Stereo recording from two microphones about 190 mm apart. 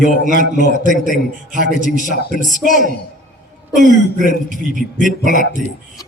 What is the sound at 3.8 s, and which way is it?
A man's voice, 45° right (ahead or behind).